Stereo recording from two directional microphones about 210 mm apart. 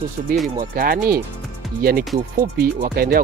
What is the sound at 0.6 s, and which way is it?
Speech, 45° right (ahead or behind).